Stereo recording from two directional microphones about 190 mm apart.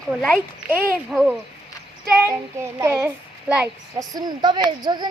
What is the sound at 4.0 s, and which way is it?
Speech, 20° right (ahead or behind).